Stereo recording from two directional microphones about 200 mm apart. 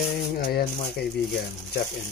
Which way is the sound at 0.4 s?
50° left (ahead or behind).